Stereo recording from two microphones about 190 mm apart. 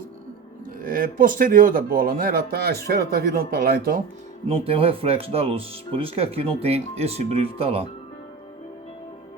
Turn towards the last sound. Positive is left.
turn(degrees=-30)  # may be behind; listen again after turning